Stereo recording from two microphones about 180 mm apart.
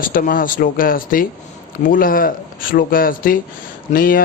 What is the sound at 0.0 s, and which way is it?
Mantra, 50° left (ahead or behind).